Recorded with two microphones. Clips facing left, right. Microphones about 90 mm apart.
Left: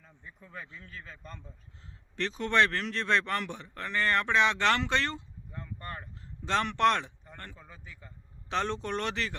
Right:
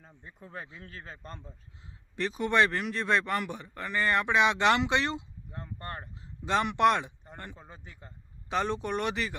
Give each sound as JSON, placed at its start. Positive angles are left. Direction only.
{"t": 0.0, "sound": "speech", "side_deg": -45}
{"t": 0.7, "sound": "a man's voice", "side_deg": -60}
{"t": 0.9, "sound": "a man's voice", "side_deg": -40}
{"t": 2.1, "sound": "a man's voice", "side_deg": -5}
{"t": 6.4, "sound": "a man's voice", "side_deg": -10}
{"t": 7.5, "sound": "a man's voice", "side_deg": -30}
{"t": 8.4, "sound": "a man's voice", "side_deg": -5}